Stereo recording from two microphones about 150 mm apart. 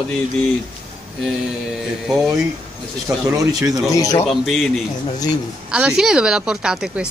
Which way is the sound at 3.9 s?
20° left (ahead or behind).